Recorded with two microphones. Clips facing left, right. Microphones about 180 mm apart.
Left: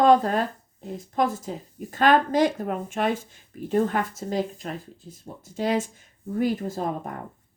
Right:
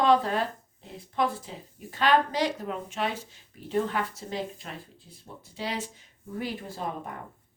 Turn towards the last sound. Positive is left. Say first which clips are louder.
# left 8 dB
turn(degrees=45)  # may be behind; listen again after turning